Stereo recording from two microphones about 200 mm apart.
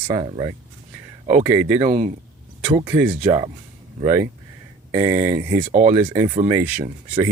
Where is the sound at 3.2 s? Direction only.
30° right (ahead or behind).